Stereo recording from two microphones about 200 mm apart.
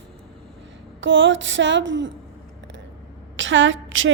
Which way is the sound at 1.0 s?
70° right (ahead or behind).